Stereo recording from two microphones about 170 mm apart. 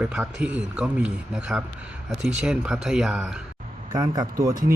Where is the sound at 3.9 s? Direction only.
20° right (ahead or behind).